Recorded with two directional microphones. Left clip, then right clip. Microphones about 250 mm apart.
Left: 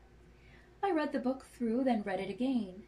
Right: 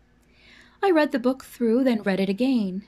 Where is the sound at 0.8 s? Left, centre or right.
Right.